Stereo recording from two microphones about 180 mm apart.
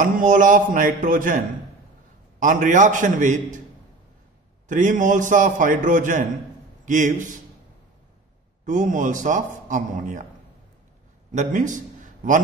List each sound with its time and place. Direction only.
0.0 s a man's voice: 45° right (ahead or behind)
2.4 s a man's voice: 45° right (ahead or behind)
4.6 s a man's voice: 45° right (ahead or behind)
8.6 s a man's voice: 45° right (ahead or behind)
11.3 s a man's voice: 45° right (ahead or behind)